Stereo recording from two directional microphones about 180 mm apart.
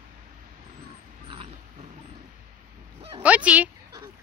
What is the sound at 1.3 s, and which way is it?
Dog, 30° right (ahead or behind).